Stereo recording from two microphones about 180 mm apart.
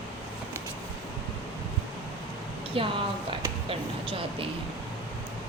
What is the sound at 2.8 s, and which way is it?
Speech, 30° right (ahead or behind).